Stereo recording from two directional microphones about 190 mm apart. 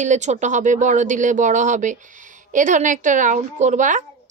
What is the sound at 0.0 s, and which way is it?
A woman's voice, 40° right (ahead or behind).